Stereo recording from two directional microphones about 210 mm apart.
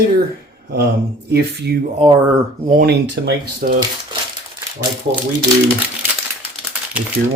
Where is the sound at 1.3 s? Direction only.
50° right (ahead or behind).